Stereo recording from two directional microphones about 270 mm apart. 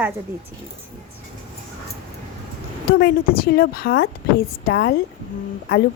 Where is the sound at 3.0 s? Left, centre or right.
Left.